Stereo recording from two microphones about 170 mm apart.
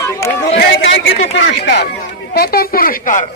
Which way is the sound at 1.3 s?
90° left.